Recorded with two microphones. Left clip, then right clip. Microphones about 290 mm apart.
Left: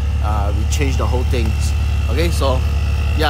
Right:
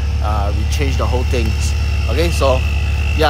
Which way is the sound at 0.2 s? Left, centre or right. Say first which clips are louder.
Right 2 dB; centre.